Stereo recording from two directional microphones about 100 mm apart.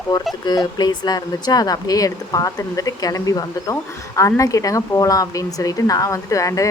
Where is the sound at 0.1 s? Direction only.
40° left (ahead or behind).